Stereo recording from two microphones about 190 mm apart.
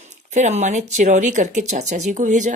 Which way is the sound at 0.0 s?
40° right (ahead or behind).